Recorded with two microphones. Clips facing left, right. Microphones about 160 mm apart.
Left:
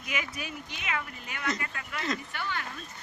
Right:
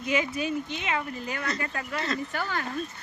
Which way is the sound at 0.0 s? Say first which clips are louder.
Right 9 dB; 25° right (ahead or behind).